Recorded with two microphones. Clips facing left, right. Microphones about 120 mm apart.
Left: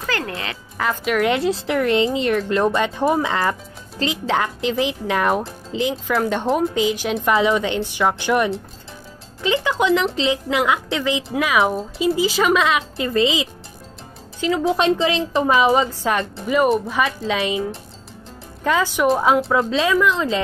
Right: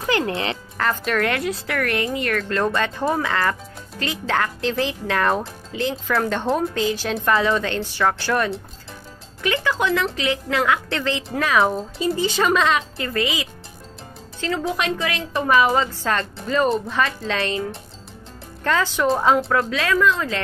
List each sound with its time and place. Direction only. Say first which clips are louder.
0.0 s speech: right 4 dB; 20° right (ahead or behind)
0.7 s a woman's voice: left 2 dB; 10° left (ahead or behind)
1.3 s a woman's voice: left 5 dB; 25° left (ahead or behind); by 12.8 s 5° left (ahead or behind)
12.9 s a woman's voice: left 5 dB; 20° left (ahead or behind)
14.7 s a woman's voice: left 6 dB; 25° left (ahead or behind); by 19.4 s 5° left (ahead or behind)
19.5 s a woman's voice: left 3 dB; 20° left (ahead or behind)